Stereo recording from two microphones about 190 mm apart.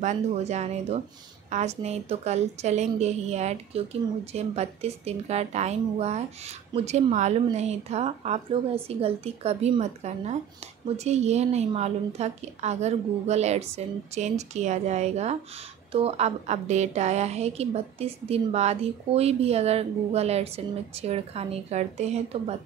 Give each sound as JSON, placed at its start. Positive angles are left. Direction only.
{"t": 0.0, "sound": "a woman's voice", "side_deg": -35}